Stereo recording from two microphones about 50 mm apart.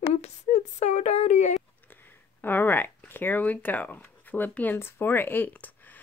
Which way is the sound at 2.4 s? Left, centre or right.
Left.